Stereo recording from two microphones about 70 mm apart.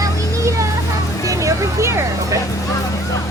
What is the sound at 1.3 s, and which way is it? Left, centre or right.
Vehicle, right.